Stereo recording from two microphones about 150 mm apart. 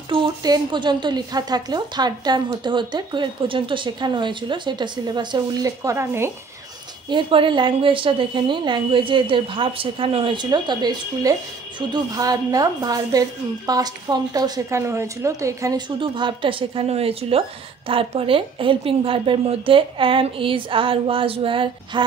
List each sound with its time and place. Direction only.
0.1 s a woman's voice: 30° right (ahead or behind)
7.1 s a woman's voice: 35° right (ahead or behind)
16.0 s a woman's voice: 35° right (ahead or behind)